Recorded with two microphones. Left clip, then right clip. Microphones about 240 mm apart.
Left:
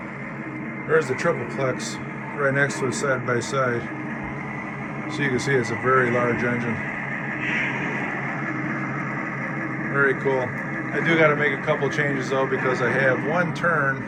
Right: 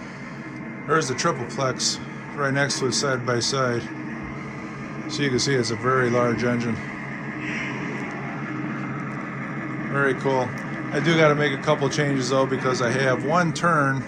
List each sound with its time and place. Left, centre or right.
0.9 s speech: centre
5.2 s speech: centre
7.4 s music: centre
9.9 s a man's voice: centre